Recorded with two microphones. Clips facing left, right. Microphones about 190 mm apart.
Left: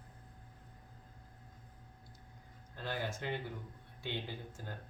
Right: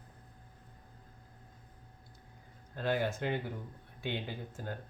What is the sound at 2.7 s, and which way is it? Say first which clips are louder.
Speech: right 7 dB; 55° right (ahead or behind).